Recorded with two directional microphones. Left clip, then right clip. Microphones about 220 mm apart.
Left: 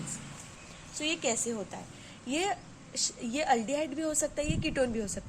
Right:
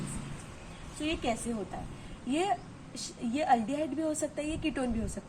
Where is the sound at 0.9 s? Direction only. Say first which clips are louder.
Left 1 dB; 50° left (ahead or behind).